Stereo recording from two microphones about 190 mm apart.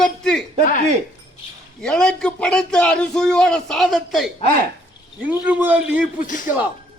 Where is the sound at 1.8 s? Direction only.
5° left (ahead or behind).